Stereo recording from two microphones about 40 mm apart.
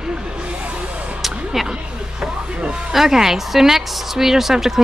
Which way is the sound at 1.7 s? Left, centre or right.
Centre.